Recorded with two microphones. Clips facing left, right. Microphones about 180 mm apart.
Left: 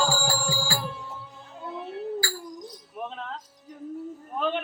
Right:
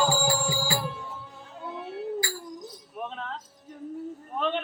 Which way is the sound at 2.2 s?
20° right (ahead or behind).